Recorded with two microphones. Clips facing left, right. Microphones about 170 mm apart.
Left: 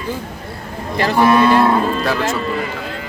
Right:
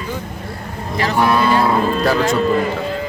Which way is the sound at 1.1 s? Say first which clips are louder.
Left 3 dB; centre (ahead or behind).